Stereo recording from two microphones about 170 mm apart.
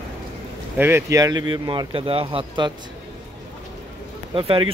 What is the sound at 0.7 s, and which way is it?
Speech, 15° right (ahead or behind).